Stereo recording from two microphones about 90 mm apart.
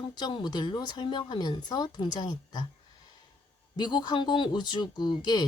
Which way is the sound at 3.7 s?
55° left (ahead or behind).